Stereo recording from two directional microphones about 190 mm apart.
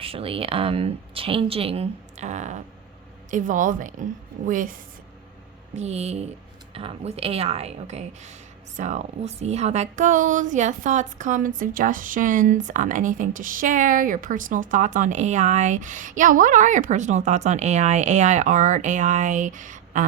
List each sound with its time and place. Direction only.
0.0 s a woman's voice: 30° right (ahead or behind); by 4.8 s 45° right (ahead or behind)
5.7 s a woman's voice: 35° right (ahead or behind)